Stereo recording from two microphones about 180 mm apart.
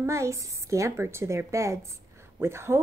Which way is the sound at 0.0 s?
15° right (ahead or behind).